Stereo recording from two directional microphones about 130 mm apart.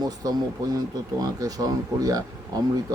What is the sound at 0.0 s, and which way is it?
Speech, 30° right (ahead or behind).